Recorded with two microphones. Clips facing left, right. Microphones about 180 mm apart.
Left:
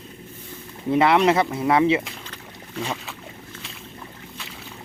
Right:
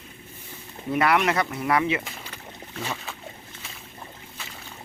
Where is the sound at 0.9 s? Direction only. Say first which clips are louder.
Left 5 dB; 25° left (ahead or behind).